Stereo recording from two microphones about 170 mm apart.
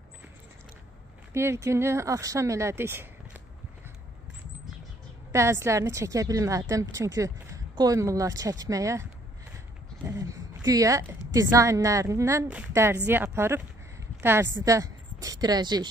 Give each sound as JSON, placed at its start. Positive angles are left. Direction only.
{"t": 1.3, "sound": "speech", "side_deg": -15}
{"t": 5.3, "sound": "a woman's voice", "side_deg": -15}
{"t": 10.0, "sound": "a woman's voice", "side_deg": -20}